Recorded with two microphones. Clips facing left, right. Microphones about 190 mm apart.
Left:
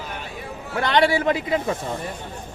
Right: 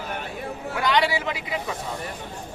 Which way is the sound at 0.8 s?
55° left (ahead or behind).